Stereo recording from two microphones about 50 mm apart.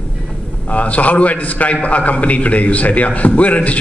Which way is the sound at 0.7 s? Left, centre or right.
Left.